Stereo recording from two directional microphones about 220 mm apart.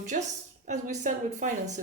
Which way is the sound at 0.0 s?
35° right (ahead or behind).